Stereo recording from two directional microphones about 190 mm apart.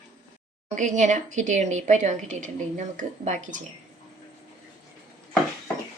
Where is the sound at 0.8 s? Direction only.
40° right (ahead or behind).